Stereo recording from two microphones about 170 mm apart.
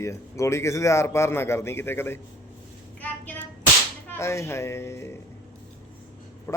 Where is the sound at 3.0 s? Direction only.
10° left (ahead or behind).